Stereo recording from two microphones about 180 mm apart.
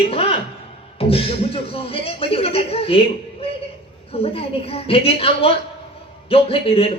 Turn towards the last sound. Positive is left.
turn(degrees=30)  # may be behind; listen again after turning